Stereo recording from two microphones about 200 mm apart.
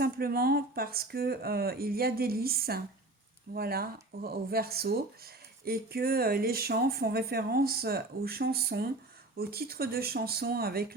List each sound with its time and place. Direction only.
0.0 s speech: 50° right (ahead or behind)